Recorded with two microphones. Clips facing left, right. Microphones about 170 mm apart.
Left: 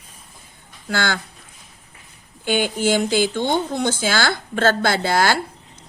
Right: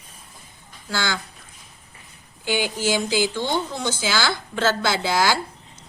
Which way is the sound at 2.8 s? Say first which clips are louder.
Left 4 dB; 55° left (ahead or behind).